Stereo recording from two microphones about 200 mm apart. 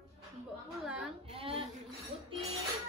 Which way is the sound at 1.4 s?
30° right (ahead or behind).